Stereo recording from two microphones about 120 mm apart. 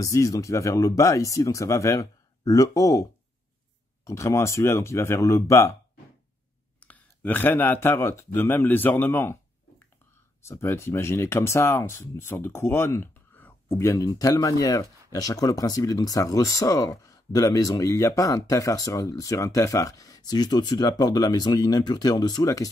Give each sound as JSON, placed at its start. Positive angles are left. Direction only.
{"t": 0.0, "sound": "speech", "side_deg": 30}
{"t": 6.8, "sound": "speech", "side_deg": 15}
{"t": 10.5, "sound": "speech", "side_deg": 20}